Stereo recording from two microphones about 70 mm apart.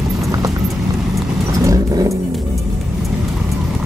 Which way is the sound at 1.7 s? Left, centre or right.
Right.